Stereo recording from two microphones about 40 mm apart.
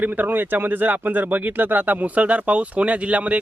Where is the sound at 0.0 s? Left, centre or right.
Right.